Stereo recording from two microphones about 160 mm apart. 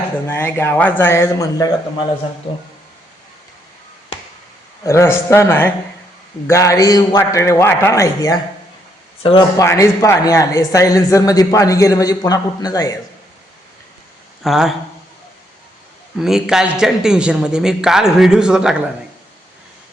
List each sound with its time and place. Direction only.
0.3 s a man's voice: 15° left (ahead or behind)
4.9 s a man's voice: 15° left (ahead or behind)
9.2 s speech: 35° left (ahead or behind)
9.6 s a man's voice: 20° left (ahead or behind)
14.4 s a man's voice: centre (ahead or behind)
16.2 s a man's voice: 5° right (ahead or behind)